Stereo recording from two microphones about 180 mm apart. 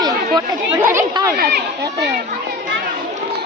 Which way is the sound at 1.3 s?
60° right (ahead or behind).